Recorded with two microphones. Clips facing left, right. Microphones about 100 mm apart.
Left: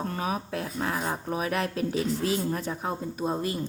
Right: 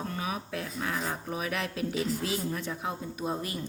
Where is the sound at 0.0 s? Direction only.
40° left (ahead or behind).